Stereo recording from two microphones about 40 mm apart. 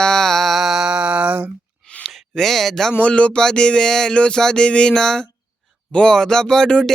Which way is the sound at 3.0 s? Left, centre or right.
Left.